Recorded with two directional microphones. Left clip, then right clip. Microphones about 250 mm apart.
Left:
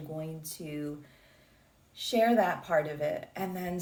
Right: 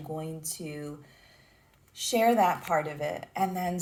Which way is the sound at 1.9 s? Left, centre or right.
Right.